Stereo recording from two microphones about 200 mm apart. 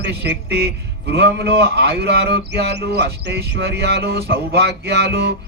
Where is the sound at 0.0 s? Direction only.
55° right (ahead or behind).